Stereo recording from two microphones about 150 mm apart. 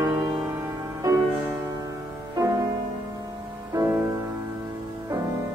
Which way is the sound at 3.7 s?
20° right (ahead or behind).